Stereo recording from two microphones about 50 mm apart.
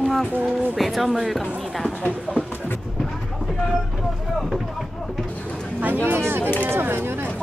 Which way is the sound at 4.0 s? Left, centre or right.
Centre.